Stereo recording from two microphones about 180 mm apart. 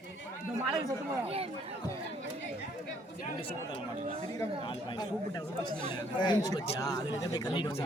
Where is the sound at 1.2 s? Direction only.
35° right (ahead or behind).